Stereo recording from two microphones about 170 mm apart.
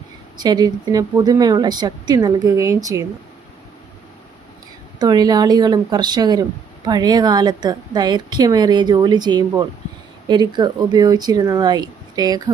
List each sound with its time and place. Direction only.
0.3 s a woman's voice: 25° right (ahead or behind)
4.9 s a woman's voice: 25° right (ahead or behind)